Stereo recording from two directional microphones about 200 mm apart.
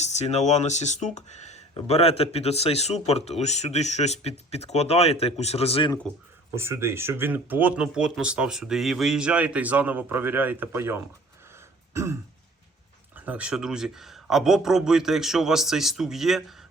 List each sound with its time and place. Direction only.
0.0 s speech: 35° left (ahead or behind)
6.5 s speech: 15° right (ahead or behind)
13.1 s speech: 5° right (ahead or behind)